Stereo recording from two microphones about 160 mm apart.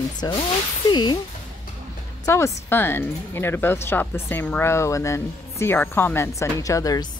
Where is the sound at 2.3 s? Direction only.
15° left (ahead or behind).